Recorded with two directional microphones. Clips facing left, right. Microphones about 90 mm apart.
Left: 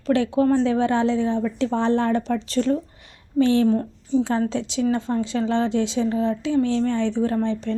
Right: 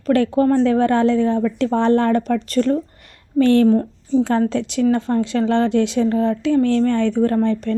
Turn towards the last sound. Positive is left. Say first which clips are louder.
# right 5 dB
turn(degrees=-50)  # may be behind; listen again after turning